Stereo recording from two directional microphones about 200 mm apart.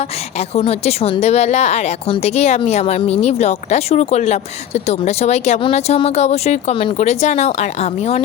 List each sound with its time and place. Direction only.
0.3 s a woman's voice: 30° left (ahead or behind)